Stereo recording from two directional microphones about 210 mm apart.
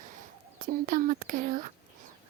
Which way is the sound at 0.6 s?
40° right (ahead or behind).